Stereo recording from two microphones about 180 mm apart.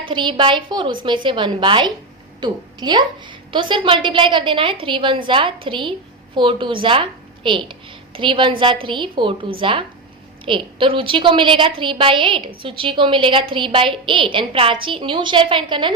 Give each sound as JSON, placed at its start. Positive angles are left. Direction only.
{"t": 0.1, "sound": "a woman's voice", "side_deg": -25}